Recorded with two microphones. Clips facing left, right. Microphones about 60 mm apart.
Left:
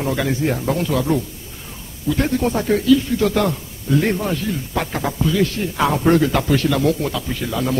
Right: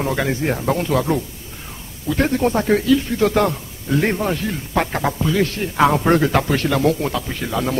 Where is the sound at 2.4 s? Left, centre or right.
Right.